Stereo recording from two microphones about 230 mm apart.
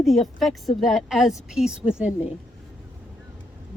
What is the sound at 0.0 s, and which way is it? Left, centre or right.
A woman's voice, centre.